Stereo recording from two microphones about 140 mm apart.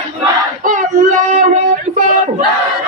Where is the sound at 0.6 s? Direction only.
65° right (ahead or behind).